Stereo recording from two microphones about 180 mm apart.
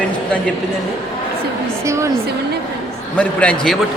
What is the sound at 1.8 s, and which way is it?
Speech, 15° right (ahead or behind).